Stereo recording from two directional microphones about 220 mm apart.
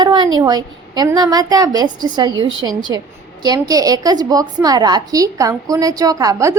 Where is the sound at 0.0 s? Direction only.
20° right (ahead or behind).